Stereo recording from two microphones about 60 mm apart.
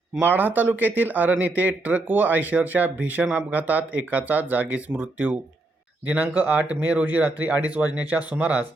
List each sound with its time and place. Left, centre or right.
0.2 s speech: right